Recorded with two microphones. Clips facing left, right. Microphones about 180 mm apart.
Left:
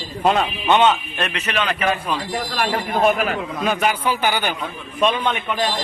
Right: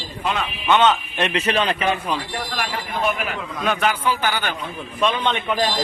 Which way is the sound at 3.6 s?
10° left (ahead or behind).